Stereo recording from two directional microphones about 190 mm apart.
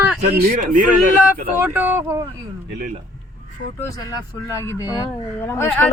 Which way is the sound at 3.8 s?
20° left (ahead or behind).